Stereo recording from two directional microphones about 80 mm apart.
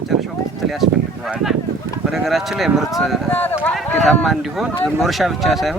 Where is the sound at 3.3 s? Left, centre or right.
Left.